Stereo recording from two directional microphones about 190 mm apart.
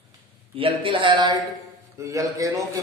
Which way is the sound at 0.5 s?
30° right (ahead or behind).